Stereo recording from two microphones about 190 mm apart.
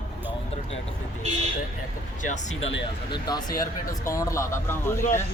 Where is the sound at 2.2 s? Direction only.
40° left (ahead or behind).